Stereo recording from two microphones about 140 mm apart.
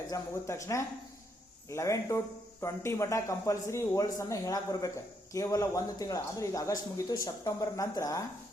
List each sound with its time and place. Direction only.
0.1 s speech: 20° left (ahead or behind)